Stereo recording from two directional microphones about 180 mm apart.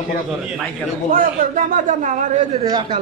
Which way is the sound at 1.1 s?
45° right (ahead or behind).